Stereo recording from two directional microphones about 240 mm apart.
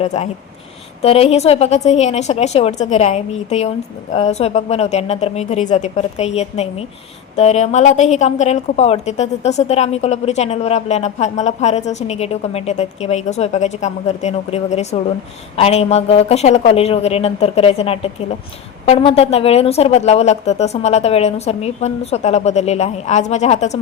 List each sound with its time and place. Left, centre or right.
0.0 s a woman's voice: left